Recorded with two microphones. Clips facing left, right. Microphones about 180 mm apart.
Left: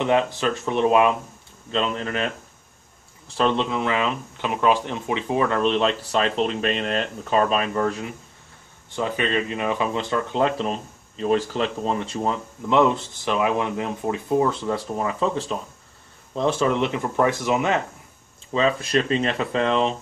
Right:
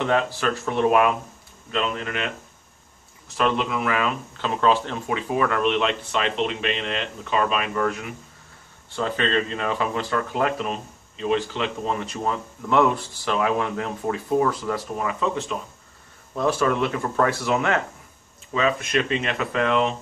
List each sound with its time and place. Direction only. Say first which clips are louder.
0.0 s speech: left 2 dB; 20° left (ahead or behind)
1.7 s speech: left 2 dB; 30° left (ahead or behind)
8.9 s speech: even; 15° left (ahead or behind)
18.5 s speech: left 2 dB; 30° left (ahead or behind)